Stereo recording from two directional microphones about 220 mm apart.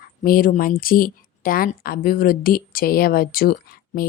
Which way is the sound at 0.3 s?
40° left (ahead or behind).